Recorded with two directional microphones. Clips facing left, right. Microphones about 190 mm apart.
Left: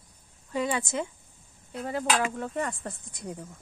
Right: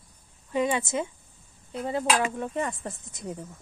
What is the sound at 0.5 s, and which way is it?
Speech, 20° right (ahead or behind).